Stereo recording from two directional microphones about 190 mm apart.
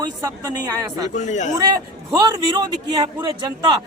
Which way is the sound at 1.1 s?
40° left (ahead or behind).